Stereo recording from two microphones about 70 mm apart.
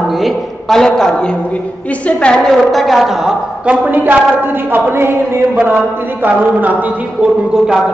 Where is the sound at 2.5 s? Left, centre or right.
Centre.